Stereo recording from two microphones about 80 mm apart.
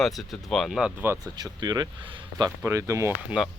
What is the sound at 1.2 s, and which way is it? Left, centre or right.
Speech, right.